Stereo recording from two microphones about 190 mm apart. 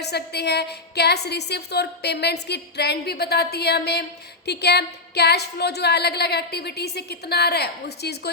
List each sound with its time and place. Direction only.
0.0 s a woman's voice: 60° left (ahead or behind)